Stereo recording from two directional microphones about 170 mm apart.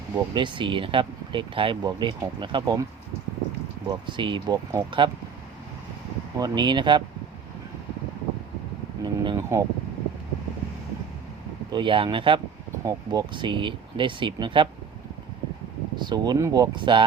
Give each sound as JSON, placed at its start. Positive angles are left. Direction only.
{"t": 0.3, "sound": "speech", "side_deg": -30}
{"t": 3.8, "sound": "speech", "side_deg": -30}
{"t": 6.3, "sound": "speech", "side_deg": -25}
{"t": 9.0, "sound": "a sound", "side_deg": -20}
{"t": 11.7, "sound": "speech", "side_deg": -30}
{"t": 16.0, "sound": "speech", "side_deg": -25}